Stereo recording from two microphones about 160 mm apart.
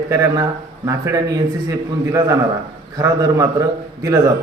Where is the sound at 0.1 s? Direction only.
20° right (ahead or behind).